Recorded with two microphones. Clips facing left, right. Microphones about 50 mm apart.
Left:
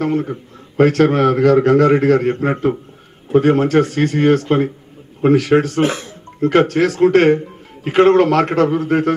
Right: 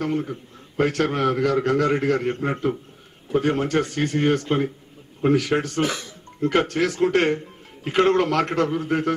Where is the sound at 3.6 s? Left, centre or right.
Left.